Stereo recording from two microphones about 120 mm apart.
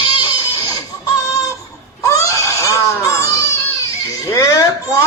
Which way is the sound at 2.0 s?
25° left (ahead or behind).